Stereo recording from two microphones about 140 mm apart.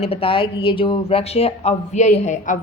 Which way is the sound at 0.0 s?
45° left (ahead or behind).